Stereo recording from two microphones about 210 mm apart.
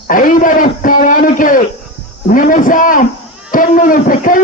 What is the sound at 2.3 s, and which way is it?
A man's voice, 40° left (ahead or behind).